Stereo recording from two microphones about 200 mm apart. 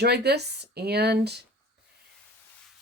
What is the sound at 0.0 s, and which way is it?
Speech, 55° right (ahead or behind).